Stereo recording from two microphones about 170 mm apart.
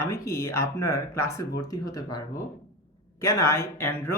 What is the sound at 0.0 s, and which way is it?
Speech, 20° left (ahead or behind).